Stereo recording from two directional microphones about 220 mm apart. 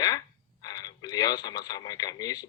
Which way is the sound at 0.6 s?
15° left (ahead or behind).